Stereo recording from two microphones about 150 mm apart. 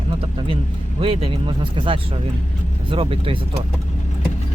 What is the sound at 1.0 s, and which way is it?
Speech, 35° right (ahead or behind).